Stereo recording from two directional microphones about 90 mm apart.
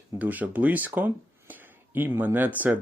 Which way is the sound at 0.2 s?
20° right (ahead or behind).